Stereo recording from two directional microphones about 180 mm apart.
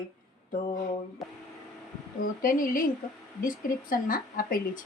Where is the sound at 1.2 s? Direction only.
Centre (ahead or behind).